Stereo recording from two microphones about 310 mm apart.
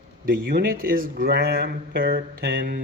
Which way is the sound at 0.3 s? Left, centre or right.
Right.